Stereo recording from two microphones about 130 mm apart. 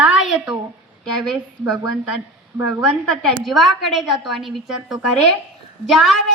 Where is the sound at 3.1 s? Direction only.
5° left (ahead or behind).